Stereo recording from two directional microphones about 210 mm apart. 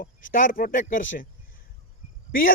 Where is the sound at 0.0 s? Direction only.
40° left (ahead or behind).